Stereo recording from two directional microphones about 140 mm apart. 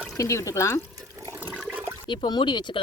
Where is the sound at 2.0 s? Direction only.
30° left (ahead or behind).